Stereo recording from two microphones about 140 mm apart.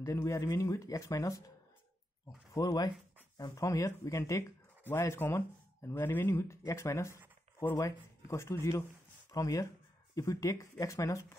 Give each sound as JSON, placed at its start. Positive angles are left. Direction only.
{"t": 0.0, "sound": "speech", "side_deg": 20}
{"t": 2.5, "sound": "speech", "side_deg": 25}